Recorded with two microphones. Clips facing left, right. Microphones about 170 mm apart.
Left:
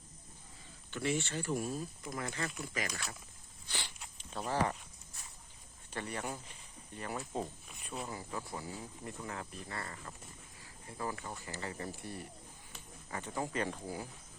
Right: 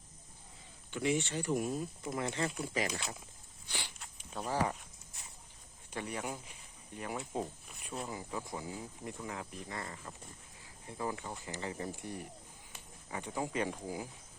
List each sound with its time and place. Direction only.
0.9 s speech: 15° right (ahead or behind)
3.7 s a sound: 10° right (ahead or behind)
4.2 s speech: 5° right (ahead or behind)
5.9 s speech: 10° right (ahead or behind)